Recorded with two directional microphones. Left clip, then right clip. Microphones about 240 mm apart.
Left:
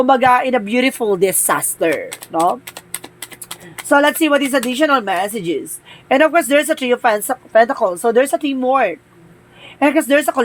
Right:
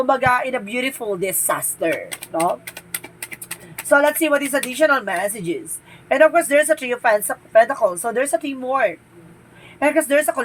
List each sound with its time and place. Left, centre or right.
0.0 s a woman's voice: left
3.8 s a woman's voice: left